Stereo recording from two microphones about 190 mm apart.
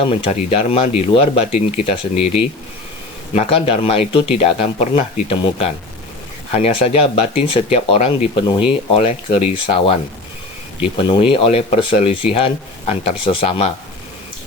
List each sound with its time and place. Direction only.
0.0 s speech: 30° left (ahead or behind)